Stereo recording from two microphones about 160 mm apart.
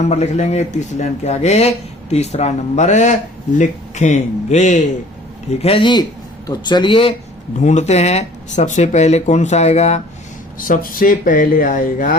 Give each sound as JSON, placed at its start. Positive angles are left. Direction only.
{"t": 0.0, "sound": "speech", "side_deg": 45}
{"t": 5.5, "sound": "speech", "side_deg": 40}
{"t": 7.6, "sound": "speech", "side_deg": 45}
{"t": 10.6, "sound": "speech", "side_deg": 60}